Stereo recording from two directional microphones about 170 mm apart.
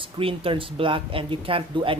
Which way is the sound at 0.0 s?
30° right (ahead or behind).